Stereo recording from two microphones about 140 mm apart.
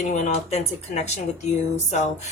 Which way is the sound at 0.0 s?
60° left (ahead or behind).